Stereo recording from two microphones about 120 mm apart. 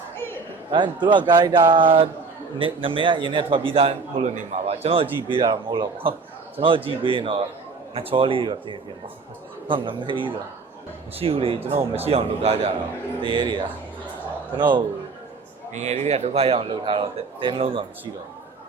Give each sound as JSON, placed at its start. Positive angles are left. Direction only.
{"t": 0.7, "sound": "a man's voice", "side_deg": -40}
{"t": 5.4, "sound": "a man's voice", "side_deg": -40}
{"t": 11.2, "sound": "a man's voice", "side_deg": -55}
{"t": 13.2, "sound": "a man's voice", "side_deg": -40}
{"t": 15.7, "sound": "a man's voice", "side_deg": -70}